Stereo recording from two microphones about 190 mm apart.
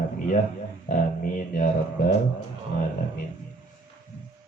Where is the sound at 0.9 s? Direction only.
45° left (ahead or behind).